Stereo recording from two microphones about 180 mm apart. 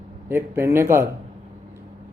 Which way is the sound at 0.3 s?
15° right (ahead or behind).